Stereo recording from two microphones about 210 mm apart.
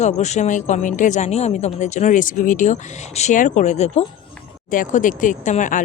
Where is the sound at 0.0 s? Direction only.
35° left (ahead or behind).